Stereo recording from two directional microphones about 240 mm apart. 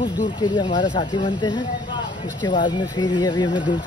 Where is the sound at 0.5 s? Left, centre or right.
Centre.